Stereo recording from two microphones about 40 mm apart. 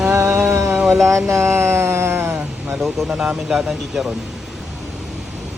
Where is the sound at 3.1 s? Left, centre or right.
Centre.